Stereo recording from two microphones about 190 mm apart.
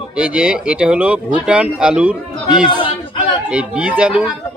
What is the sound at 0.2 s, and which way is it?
A man's voice, 5° right (ahead or behind).